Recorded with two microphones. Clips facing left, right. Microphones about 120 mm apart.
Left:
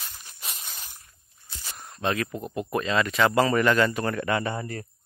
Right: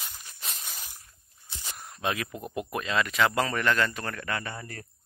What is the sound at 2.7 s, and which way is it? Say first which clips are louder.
Speech: left 4 dB; centre (ahead or behind).